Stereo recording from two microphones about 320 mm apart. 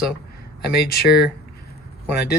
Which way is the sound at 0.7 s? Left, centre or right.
Left.